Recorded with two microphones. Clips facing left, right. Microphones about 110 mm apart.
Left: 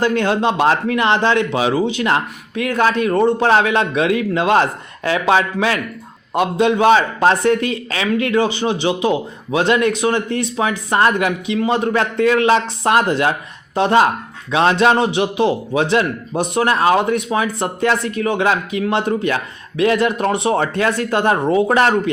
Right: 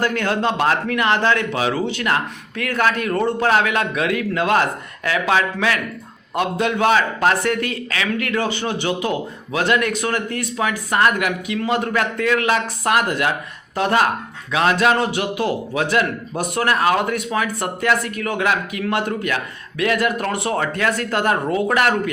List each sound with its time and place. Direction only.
0.0 s a man's voice: 20° left (ahead or behind)